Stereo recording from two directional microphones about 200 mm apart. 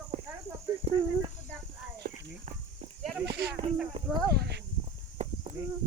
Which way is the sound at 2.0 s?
40° right (ahead or behind).